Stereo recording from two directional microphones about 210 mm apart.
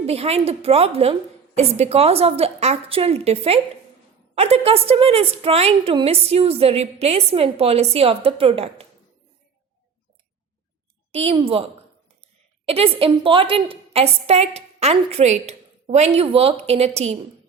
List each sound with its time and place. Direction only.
0.0 s a woman's voice: 30° right (ahead or behind)
11.1 s a woman's voice: 25° right (ahead or behind)